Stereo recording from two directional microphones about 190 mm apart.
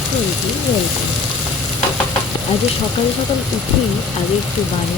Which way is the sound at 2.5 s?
30° left (ahead or behind).